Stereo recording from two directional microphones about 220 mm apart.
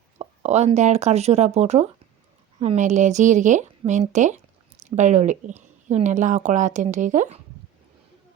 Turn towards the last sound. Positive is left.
turn(degrees=-30)  # may be behind; listen again after turning